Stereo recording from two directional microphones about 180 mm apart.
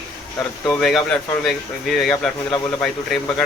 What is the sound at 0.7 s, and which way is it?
Speech, centre (ahead or behind).